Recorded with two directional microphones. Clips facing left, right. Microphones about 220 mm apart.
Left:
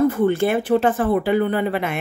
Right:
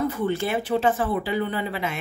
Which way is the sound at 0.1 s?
55° left (ahead or behind).